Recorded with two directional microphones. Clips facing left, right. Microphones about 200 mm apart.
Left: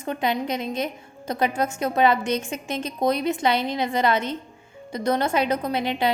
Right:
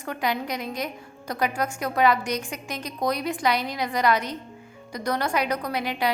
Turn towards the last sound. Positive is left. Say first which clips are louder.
# left 3 dB
turn(degrees=25)  # may be behind; listen again after turning